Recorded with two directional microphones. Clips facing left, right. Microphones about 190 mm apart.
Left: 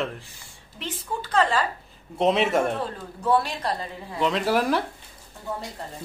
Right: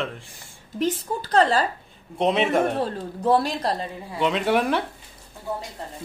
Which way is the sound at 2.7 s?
35° right (ahead or behind).